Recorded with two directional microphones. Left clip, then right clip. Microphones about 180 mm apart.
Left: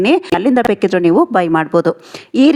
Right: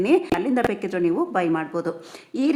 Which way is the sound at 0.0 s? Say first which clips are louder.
Left 8 dB; 45° left (ahead or behind).